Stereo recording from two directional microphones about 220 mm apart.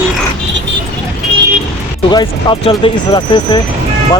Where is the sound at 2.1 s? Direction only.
20° left (ahead or behind).